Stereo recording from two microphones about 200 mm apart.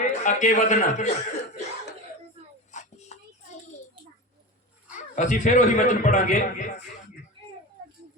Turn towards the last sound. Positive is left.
turn(degrees=40)  # may be behind; listen again after turning